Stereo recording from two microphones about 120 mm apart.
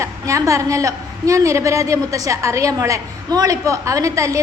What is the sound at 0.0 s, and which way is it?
A woman's voice, 25° right (ahead or behind).